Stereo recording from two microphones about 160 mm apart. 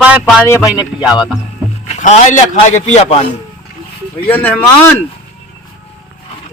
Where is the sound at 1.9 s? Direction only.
50° left (ahead or behind).